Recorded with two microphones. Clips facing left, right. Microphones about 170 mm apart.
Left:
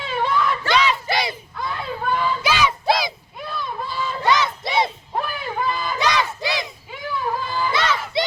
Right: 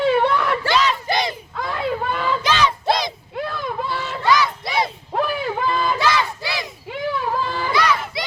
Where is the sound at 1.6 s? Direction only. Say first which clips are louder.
Right 5 dB; 75° right (ahead or behind).